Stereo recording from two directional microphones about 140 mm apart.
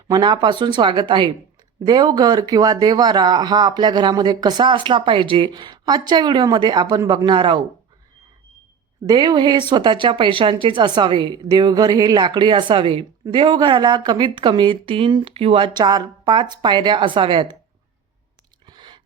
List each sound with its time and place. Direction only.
0.1 s speech: 30° right (ahead or behind)
9.0 s speech: 30° right (ahead or behind)
18.6 s a sound: 30° right (ahead or behind)